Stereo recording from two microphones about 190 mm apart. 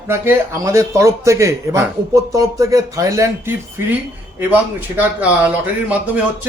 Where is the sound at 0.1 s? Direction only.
15° right (ahead or behind).